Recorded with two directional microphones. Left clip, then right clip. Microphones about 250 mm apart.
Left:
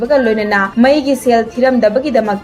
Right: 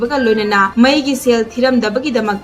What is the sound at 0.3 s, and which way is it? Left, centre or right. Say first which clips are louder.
Speech: even; centre.